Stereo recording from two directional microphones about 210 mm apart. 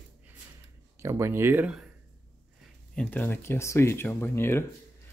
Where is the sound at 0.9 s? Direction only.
15° right (ahead or behind).